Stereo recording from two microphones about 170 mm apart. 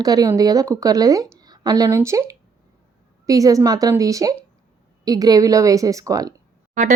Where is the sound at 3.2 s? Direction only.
20° right (ahead or behind).